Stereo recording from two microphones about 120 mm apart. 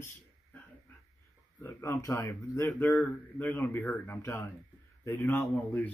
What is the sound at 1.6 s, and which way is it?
Speech, 25° left (ahead or behind).